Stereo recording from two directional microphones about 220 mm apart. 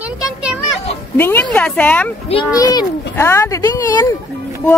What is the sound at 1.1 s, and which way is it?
Speech, 10° left (ahead or behind).